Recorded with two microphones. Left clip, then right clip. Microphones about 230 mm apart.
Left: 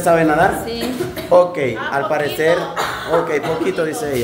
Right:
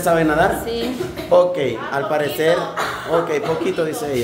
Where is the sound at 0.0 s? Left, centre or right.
Centre.